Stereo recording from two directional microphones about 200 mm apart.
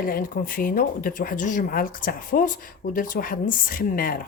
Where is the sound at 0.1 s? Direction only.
45° left (ahead or behind).